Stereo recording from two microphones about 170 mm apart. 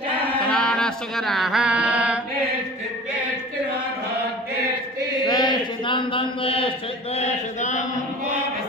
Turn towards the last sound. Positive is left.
turn(degrees=45)  # may be behind; listen again after turning